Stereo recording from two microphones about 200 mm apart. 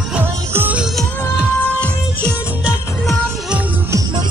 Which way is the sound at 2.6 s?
5° right (ahead or behind).